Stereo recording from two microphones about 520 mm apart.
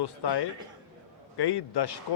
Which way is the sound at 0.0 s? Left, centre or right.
Left.